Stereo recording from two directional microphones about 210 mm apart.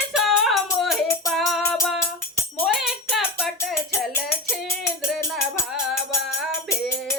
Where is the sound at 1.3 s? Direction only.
Centre (ahead or behind).